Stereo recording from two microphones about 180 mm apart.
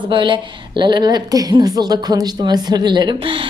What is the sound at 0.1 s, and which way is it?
A woman's voice, 25° right (ahead or behind).